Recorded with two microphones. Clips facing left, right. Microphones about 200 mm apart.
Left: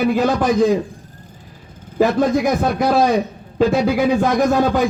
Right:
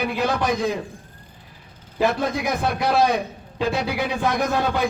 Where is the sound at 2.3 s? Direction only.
45° left (ahead or behind).